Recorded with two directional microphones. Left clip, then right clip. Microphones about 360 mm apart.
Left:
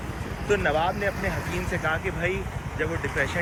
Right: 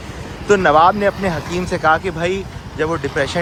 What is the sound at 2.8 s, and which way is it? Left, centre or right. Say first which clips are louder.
Speech: right 8 dB; right.